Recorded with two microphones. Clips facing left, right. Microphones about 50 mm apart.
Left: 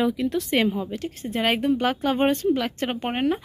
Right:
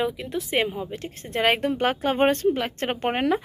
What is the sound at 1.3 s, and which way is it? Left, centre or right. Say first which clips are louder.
Speech: even; right.